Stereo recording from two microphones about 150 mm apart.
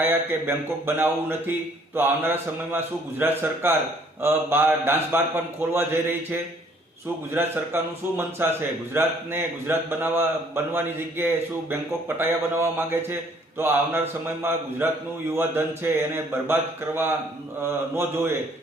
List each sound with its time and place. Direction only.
0.0 s a man's voice: 15° right (ahead or behind)